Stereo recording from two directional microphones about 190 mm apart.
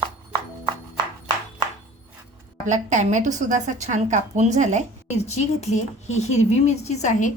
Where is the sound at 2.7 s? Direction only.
40° right (ahead or behind).